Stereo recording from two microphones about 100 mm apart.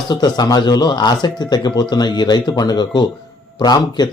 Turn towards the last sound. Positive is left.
turn(degrees=45)  # may be behind; listen again after turning